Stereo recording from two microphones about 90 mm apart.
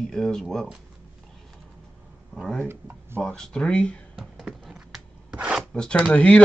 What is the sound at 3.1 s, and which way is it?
Speech, 5° left (ahead or behind).